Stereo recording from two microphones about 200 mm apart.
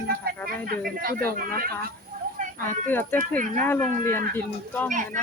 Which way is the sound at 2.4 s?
40° right (ahead or behind).